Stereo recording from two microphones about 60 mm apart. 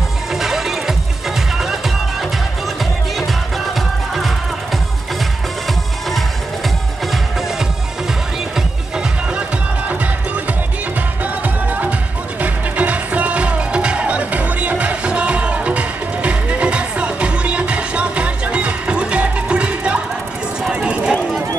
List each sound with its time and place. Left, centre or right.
0.3 s music: centre
8.5 s music: centre
11.4 s music: right
20.7 s a sound: centre